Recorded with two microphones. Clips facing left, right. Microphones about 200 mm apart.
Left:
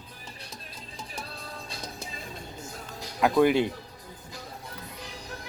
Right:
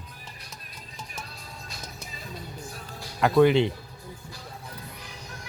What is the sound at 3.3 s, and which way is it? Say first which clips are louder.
Speech: right 3 dB; 5° left (ahead or behind).